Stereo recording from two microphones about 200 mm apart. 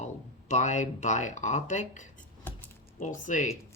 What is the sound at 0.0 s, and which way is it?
Speech, 35° left (ahead or behind).